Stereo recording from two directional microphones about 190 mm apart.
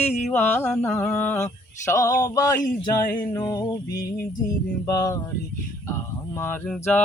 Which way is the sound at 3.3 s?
20° left (ahead or behind).